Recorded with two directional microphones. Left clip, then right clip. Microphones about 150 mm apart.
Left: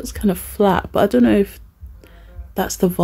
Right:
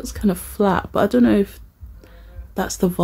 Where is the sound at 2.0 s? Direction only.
20° left (ahead or behind).